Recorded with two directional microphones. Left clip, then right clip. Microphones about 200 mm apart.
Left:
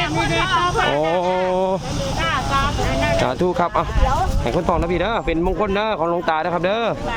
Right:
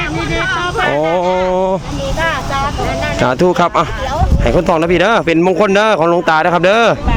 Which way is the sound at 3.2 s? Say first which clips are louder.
Right 7 dB; 30° right (ahead or behind).